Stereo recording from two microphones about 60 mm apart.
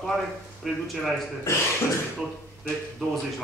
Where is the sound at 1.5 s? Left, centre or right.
Left.